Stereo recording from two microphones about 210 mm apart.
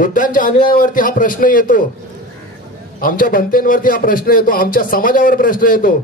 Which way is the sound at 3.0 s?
40° left (ahead or behind).